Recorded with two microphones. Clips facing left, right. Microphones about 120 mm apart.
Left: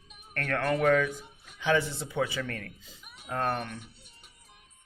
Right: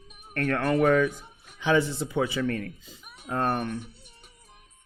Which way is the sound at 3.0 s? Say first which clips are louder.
Right 3 dB; 35° right (ahead or behind).